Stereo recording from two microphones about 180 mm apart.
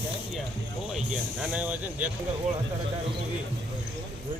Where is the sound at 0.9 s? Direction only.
5° right (ahead or behind).